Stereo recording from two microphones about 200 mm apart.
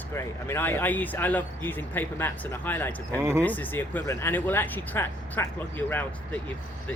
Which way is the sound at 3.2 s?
15° right (ahead or behind).